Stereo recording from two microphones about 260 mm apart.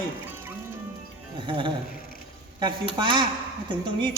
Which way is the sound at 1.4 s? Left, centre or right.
Centre.